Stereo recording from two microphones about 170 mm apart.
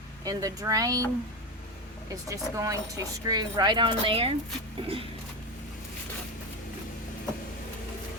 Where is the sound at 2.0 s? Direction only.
20° right (ahead or behind).